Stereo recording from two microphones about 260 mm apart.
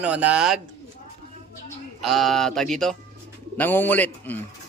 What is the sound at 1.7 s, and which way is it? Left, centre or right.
A man's voice, centre.